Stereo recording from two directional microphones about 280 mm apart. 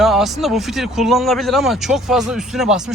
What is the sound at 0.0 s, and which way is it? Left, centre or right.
Speech, centre.